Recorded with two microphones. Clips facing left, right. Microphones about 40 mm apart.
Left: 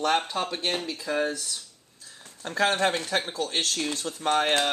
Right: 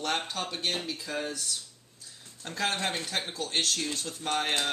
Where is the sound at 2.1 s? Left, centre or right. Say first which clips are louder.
Left 8 dB; left.